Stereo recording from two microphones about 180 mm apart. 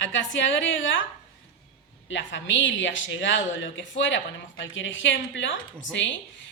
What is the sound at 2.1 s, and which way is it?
Speech, 90° left.